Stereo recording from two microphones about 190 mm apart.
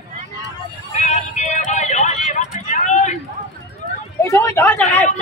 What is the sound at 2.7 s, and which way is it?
Vehicle, 40° left (ahead or behind).